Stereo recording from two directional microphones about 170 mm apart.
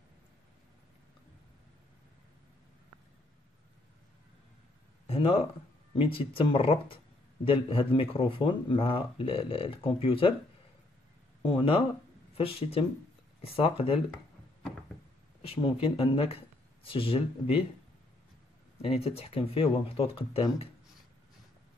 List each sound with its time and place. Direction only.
5.0 s a sound: 35° left (ahead or behind)
5.9 s a man's voice: 30° left (ahead or behind)
11.4 s a man's voice: 30° left (ahead or behind)
15.4 s speech: 35° left (ahead or behind)
18.8 s a man's voice: 35° left (ahead or behind)